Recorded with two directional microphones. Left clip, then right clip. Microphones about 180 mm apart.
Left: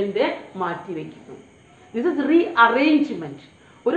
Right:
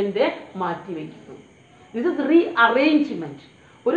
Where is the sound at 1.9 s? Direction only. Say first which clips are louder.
Even; 25° left (ahead or behind).